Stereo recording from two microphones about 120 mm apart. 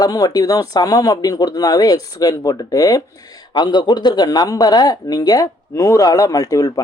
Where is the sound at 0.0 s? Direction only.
30° left (ahead or behind).